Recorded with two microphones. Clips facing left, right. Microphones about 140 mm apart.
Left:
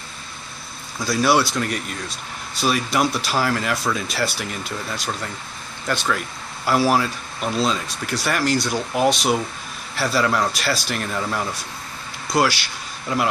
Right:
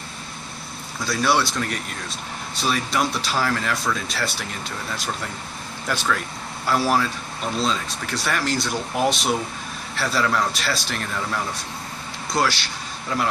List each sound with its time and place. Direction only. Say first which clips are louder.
1.0 s speech: left 3 dB; 5° left (ahead or behind)